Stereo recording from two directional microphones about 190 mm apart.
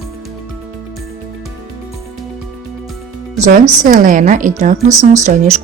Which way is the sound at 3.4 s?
40° right (ahead or behind).